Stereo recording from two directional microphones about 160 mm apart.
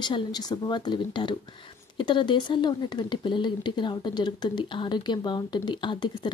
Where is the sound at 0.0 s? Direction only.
25° left (ahead or behind).